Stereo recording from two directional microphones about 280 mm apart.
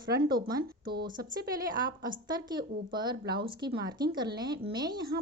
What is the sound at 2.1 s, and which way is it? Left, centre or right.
A woman's voice, centre.